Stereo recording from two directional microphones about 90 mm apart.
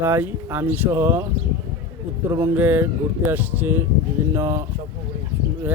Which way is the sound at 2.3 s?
30° right (ahead or behind).